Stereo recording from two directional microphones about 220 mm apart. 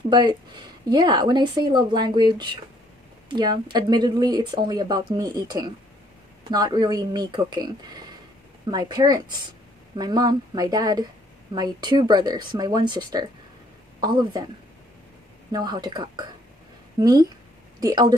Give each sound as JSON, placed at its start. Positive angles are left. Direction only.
{"t": 0.1, "sound": "a woman's voice", "side_deg": -20}
{"t": 15.5, "sound": "a woman's voice", "side_deg": -20}